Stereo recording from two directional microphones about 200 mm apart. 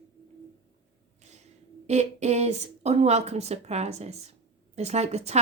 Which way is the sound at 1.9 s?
35° right (ahead or behind).